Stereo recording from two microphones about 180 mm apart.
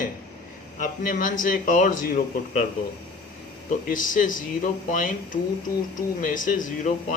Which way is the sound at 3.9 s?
50° left (ahead or behind).